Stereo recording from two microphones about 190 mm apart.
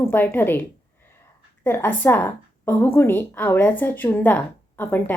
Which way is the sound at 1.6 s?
10° left (ahead or behind).